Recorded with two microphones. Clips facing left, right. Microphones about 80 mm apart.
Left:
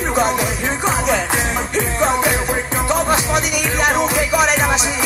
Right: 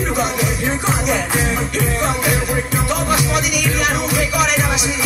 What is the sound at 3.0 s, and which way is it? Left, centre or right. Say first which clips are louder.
Music: left 1 dB; left.